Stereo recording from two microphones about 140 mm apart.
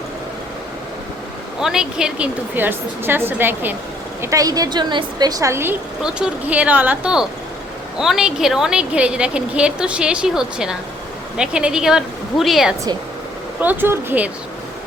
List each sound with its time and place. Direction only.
1.5 s a woman's voice: 5° right (ahead or behind)
6.0 s a woman's voice: 5° right (ahead or behind)
13.6 s a woman's voice: 15° right (ahead or behind)